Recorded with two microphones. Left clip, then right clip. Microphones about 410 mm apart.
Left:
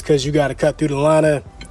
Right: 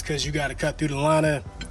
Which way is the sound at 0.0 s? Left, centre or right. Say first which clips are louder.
Left 11 dB; centre.